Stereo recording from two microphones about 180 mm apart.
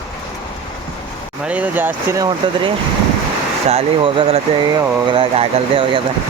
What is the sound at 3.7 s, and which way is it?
Speech, 30° right (ahead or behind).